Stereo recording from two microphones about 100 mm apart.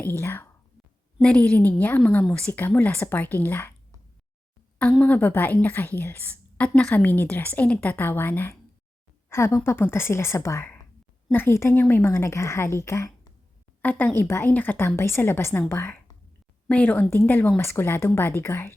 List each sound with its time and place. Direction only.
0.0 s a woman's voice: 20° left (ahead or behind)
4.8 s a woman's voice: 10° left (ahead or behind)